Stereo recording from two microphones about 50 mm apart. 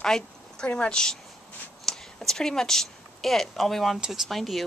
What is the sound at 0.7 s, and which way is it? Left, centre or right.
A woman's voice, centre.